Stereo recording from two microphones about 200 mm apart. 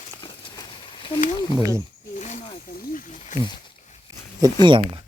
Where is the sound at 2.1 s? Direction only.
35° left (ahead or behind).